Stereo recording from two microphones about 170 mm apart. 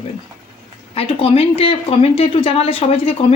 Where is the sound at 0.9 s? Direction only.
35° left (ahead or behind).